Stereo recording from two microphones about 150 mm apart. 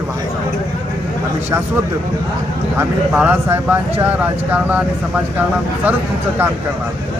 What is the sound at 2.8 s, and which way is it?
Speech, 10° right (ahead or behind).